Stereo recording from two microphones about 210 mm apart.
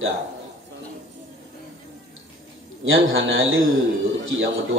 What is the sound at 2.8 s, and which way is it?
A man's voice, 70° right (ahead or behind).